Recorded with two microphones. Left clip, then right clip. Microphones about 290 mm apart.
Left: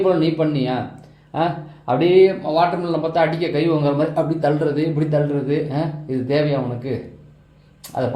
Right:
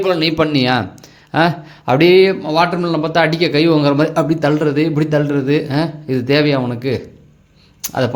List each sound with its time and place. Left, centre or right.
0.1 s a man's voice: right